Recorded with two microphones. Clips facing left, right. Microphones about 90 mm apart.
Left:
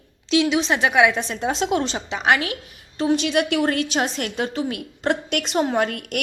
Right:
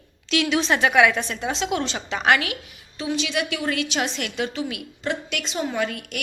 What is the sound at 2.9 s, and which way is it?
Speech, 50° left (ahead or behind).